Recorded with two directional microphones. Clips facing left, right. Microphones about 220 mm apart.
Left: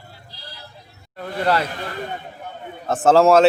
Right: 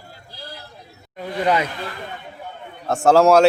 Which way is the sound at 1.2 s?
10° right (ahead or behind).